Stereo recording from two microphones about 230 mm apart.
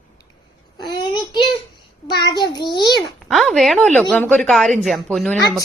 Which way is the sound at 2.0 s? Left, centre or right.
Centre.